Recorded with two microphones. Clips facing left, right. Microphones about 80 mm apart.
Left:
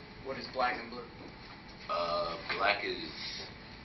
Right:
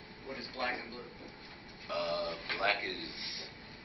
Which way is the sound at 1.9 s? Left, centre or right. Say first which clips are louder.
Left 2 dB; centre.